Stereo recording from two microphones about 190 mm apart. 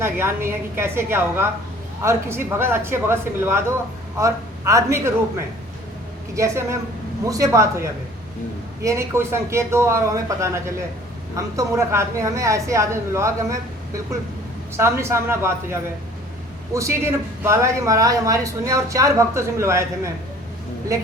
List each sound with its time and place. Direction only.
0.0 s a man's voice: 15° right (ahead or behind)
6.3 s a man's voice: 15° right (ahead or behind)
20.9 s a man's voice: 15° right (ahead or behind)